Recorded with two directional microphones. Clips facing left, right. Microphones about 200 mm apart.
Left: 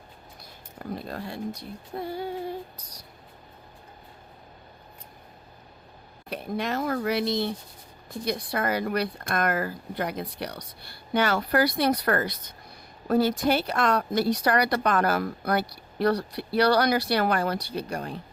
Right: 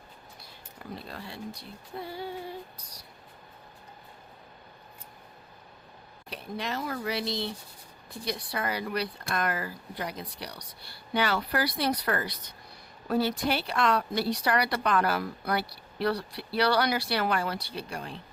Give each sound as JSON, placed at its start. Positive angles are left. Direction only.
{"t": 0.9, "sound": "a sound", "side_deg": 45}
{"t": 2.0, "sound": "speech", "side_deg": 50}
{"t": 6.3, "sound": "speech", "side_deg": 50}